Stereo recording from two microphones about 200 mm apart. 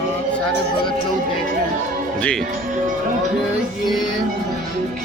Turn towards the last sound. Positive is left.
turn(degrees=0)  # may be behind; listen again after turning